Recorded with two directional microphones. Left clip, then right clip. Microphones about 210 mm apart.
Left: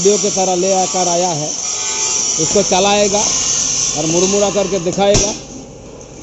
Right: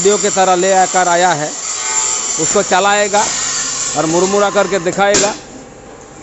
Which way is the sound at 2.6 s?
40° right (ahead or behind).